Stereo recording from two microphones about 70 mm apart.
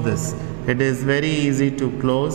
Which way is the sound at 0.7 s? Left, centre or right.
Centre.